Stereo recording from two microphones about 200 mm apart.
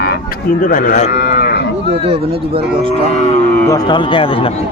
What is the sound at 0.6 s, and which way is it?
Speech, 45° left (ahead or behind).